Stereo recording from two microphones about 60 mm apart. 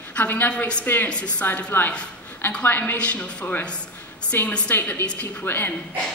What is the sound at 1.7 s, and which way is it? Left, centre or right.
A woman's voice, left.